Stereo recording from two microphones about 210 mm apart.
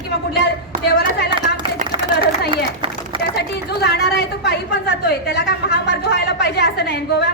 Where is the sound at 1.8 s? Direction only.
35° right (ahead or behind).